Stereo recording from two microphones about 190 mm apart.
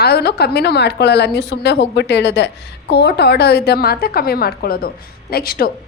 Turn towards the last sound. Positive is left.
turn(degrees=50)  # may be behind; listen again after turning